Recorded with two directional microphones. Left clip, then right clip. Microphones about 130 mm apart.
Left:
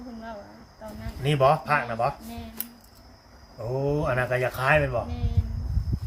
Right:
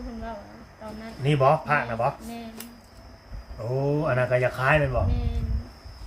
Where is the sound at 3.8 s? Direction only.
50° left (ahead or behind).